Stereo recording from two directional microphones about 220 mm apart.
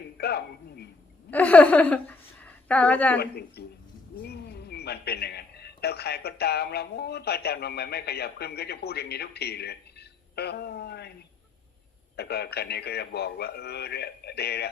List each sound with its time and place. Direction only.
0.2 s speech: 45° left (ahead or behind)
1.3 s a woman's voice: 5° left (ahead or behind)
3.2 s speech: 45° left (ahead or behind)
12.1 s speech: 45° left (ahead or behind)